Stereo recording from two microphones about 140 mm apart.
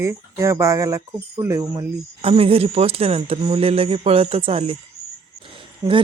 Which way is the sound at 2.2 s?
45° right (ahead or behind).